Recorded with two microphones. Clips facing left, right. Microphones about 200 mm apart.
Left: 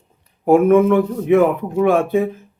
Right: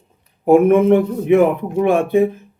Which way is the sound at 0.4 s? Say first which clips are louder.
Right 1 dB; 20° right (ahead or behind).